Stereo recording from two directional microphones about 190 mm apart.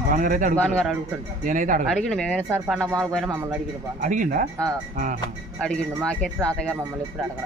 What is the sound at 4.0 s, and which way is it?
Speech, 45° right (ahead or behind).